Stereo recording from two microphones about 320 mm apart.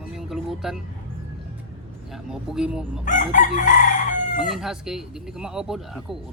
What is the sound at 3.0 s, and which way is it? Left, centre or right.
Chicken, left.